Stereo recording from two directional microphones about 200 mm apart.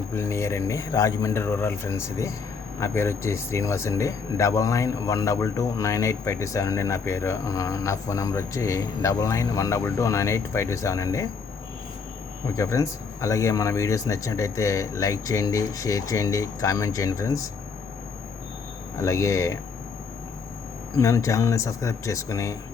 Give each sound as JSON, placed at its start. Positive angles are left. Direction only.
{"t": 0.1, "sound": "speech", "side_deg": 15}
{"t": 12.5, "sound": "speech", "side_deg": 15}
{"t": 18.9, "sound": "speech", "side_deg": 15}
{"t": 21.0, "sound": "speech", "side_deg": 15}